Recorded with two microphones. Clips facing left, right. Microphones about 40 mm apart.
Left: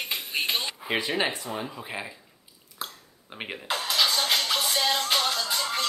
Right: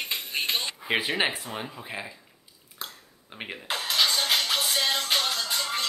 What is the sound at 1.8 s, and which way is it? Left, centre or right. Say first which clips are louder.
Speech: left 1 dB; centre.